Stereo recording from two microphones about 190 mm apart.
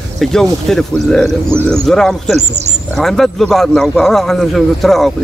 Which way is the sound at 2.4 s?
35° right (ahead or behind).